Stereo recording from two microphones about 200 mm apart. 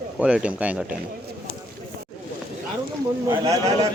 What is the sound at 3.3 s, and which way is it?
Speech, 15° right (ahead or behind).